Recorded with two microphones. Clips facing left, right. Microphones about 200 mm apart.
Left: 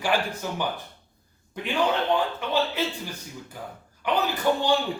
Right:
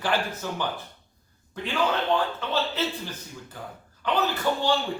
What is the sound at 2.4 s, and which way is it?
A man's voice, 15° left (ahead or behind).